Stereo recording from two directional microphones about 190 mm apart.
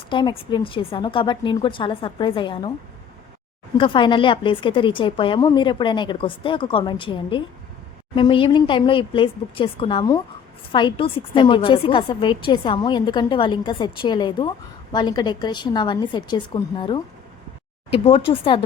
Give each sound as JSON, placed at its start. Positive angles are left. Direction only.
{"t": 0.1, "sound": "a woman's voice", "side_deg": 25}
{"t": 3.8, "sound": "a woman's voice", "side_deg": 25}